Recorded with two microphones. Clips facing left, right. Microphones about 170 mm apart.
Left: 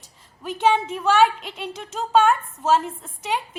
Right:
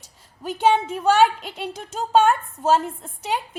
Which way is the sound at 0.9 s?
35° right (ahead or behind).